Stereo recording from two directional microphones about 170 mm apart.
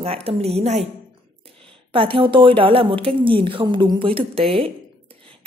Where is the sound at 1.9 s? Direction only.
30° right (ahead or behind).